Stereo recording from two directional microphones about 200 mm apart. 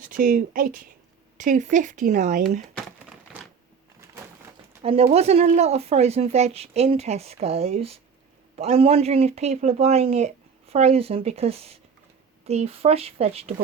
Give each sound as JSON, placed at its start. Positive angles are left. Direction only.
{"t": 0.0, "sound": "speech", "side_deg": -45}
{"t": 4.8, "sound": "speech", "side_deg": -30}